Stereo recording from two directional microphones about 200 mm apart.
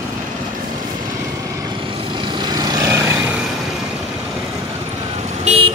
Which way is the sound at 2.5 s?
20° right (ahead or behind).